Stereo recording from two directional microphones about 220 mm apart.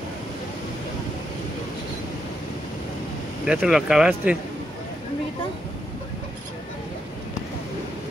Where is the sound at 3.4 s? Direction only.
5° right (ahead or behind).